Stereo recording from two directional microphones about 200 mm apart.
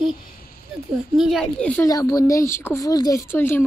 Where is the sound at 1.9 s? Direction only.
15° left (ahead or behind).